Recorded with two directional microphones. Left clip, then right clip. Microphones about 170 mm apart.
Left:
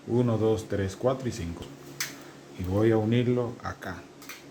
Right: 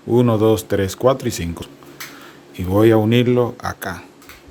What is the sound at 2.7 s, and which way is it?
Speech, 75° right (ahead or behind).